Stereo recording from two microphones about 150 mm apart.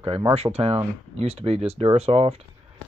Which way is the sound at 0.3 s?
45° right (ahead or behind).